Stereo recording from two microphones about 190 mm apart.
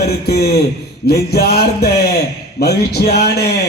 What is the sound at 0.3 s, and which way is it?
A man's voice, 55° left (ahead or behind).